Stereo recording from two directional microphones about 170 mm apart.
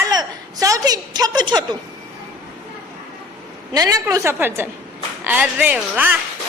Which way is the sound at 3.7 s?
20° right (ahead or behind).